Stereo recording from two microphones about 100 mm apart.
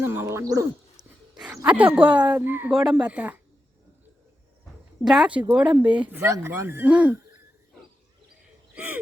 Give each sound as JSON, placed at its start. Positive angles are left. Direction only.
{"t": 0.0, "sound": "wild animals", "side_deg": -25}
{"t": 1.6, "sound": "speech", "side_deg": -15}
{"t": 2.7, "sound": "speech", "side_deg": -5}
{"t": 5.0, "sound": "speech", "side_deg": -5}
{"t": 6.2, "sound": "speech", "side_deg": -25}
{"t": 6.9, "sound": "speech", "side_deg": -10}
{"t": 8.7, "sound": "speech", "side_deg": -15}